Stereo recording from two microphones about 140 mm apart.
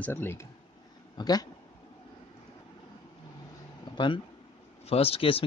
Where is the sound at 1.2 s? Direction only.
30° left (ahead or behind).